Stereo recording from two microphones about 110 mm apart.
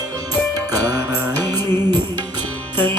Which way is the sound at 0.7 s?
35° right (ahead or behind).